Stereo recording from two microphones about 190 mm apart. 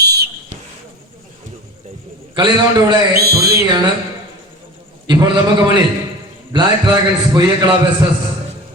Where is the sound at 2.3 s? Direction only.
25° right (ahead or behind).